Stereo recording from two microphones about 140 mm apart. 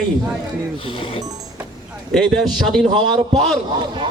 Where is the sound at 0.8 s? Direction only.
40° left (ahead or behind).